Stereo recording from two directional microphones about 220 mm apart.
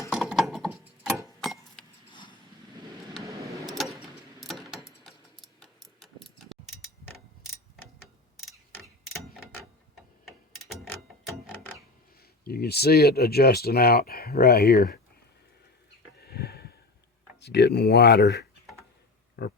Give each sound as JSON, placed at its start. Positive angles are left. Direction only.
{"t": 0.1, "sound": "mechanisms", "side_deg": 0}
{"t": 1.0, "sound": "vehicle", "side_deg": -15}
{"t": 1.4, "sound": "vehicle", "side_deg": 0}
{"t": 3.2, "sound": "a sound", "side_deg": -15}
{"t": 3.7, "sound": "a sound", "side_deg": 0}
{"t": 5.6, "sound": "tick-tock", "side_deg": 0}
{"t": 8.4, "sound": "clock", "side_deg": 0}
{"t": 10.6, "sound": "mechanisms", "side_deg": 0}
{"t": 12.5, "sound": "speech", "side_deg": 45}
{"t": 16.2, "sound": "a sound", "side_deg": 45}
{"t": 17.4, "sound": "speech", "side_deg": 50}
{"t": 19.4, "sound": "a sound", "side_deg": 45}